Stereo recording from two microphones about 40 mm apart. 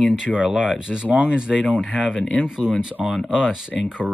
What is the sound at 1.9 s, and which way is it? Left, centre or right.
Speech, centre.